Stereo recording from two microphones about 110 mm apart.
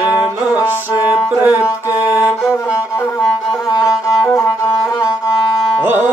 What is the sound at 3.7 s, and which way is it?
Music, 30° left (ahead or behind).